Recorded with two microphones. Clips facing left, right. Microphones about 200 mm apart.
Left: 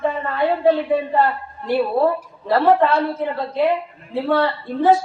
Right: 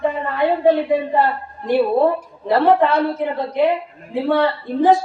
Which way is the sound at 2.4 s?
15° right (ahead or behind).